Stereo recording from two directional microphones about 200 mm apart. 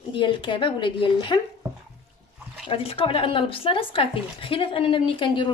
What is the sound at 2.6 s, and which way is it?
Speech, 30° left (ahead or behind).